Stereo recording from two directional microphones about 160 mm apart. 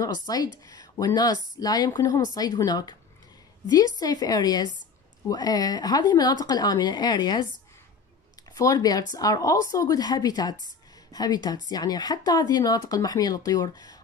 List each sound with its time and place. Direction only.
0.0 s speech: 25° left (ahead or behind)
8.5 s speech: 25° left (ahead or behind)